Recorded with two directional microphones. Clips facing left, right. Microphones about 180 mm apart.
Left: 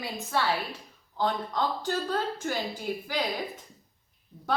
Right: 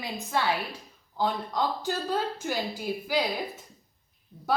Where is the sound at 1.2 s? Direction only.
10° right (ahead or behind).